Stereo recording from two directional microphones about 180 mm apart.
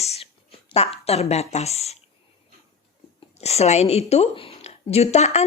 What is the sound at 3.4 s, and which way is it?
A woman's voice, 35° left (ahead or behind).